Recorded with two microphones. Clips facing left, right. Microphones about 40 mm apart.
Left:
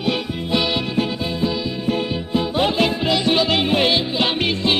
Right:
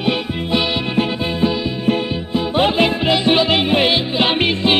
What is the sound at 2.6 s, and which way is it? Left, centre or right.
Music, right.